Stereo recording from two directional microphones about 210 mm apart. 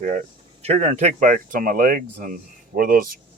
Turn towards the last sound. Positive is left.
turn(degrees=-45)  # may be behind; listen again after turning